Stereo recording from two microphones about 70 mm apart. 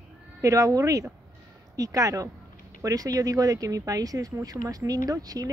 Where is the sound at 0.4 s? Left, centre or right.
Right.